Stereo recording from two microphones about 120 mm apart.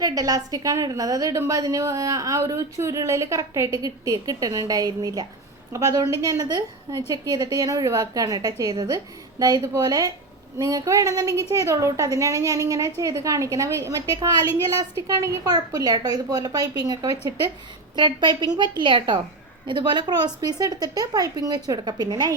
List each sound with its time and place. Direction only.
0.0 s a woman's voice: 30° right (ahead or behind)